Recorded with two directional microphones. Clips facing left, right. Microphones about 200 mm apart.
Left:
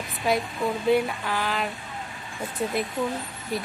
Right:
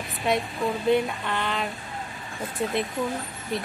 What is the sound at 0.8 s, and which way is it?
Speech, centre (ahead or behind).